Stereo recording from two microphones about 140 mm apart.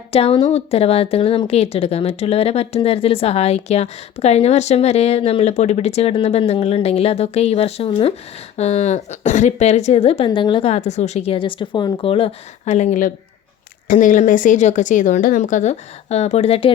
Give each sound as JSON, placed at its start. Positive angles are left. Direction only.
{"t": 0.1, "sound": "a woman's voice", "side_deg": 45}
{"t": 8.5, "sound": "a woman's voice", "side_deg": 50}
{"t": 10.2, "sound": "a woman's voice", "side_deg": 35}